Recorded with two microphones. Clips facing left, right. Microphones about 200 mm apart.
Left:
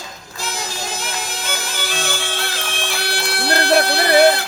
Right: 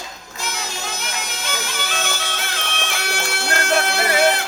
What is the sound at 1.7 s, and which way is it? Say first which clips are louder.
Music: left 2 dB; 35° left (ahead or behind).